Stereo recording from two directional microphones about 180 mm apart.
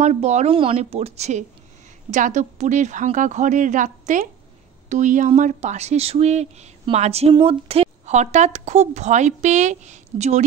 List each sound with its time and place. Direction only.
0.0 s a woman's voice: 40° right (ahead or behind)